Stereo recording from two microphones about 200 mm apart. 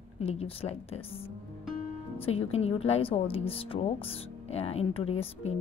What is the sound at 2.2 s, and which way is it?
Speech, 30° left (ahead or behind).